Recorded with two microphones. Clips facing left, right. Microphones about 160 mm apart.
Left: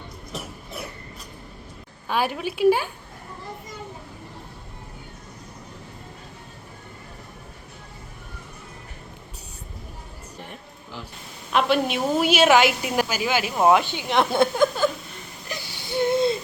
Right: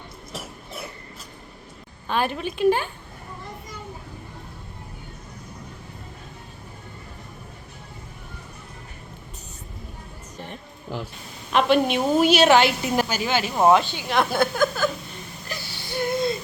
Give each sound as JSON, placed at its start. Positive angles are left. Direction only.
{"t": 2.0, "sound": "a woman's voice", "side_deg": 10}
{"t": 10.9, "sound": "a sound", "side_deg": -55}
{"t": 11.5, "sound": "a woman's voice", "side_deg": 0}
{"t": 15.4, "sound": "whimper", "side_deg": 20}